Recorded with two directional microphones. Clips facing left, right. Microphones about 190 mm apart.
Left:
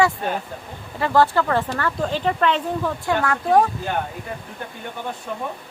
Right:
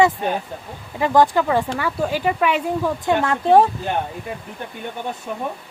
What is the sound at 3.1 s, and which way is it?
Speech, 20° right (ahead or behind).